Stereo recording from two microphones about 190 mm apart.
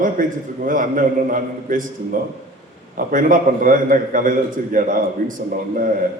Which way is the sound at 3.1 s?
45° right (ahead or behind).